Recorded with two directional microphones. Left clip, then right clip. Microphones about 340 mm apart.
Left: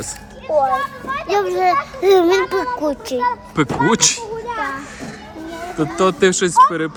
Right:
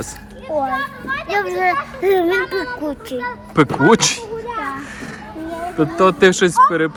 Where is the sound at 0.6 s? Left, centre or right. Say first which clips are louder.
Left 3 dB; centre.